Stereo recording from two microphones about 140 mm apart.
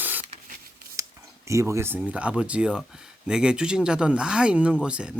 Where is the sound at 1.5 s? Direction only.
20° right (ahead or behind).